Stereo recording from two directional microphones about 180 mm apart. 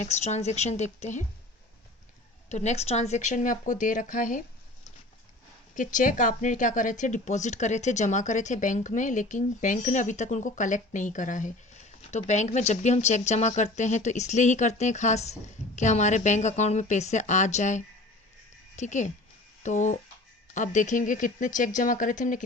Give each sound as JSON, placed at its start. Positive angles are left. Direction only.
{"t": 0.0, "sound": "speech", "side_deg": 40}
{"t": 2.5, "sound": "speech", "side_deg": 40}